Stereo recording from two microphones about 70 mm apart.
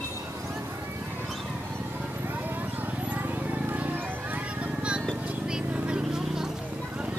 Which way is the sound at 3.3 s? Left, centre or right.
Right.